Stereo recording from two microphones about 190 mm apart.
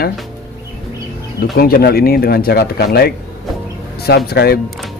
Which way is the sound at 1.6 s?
55° left (ahead or behind).